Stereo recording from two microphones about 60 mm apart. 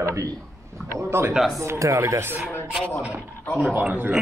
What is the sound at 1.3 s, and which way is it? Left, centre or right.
Speech, centre.